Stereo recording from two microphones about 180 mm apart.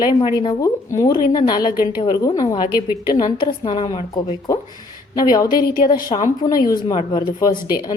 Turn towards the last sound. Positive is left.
turn(degrees=25)  # may be behind; listen again after turning